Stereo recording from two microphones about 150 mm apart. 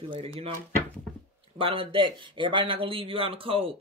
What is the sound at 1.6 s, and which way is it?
Speech, 35° right (ahead or behind).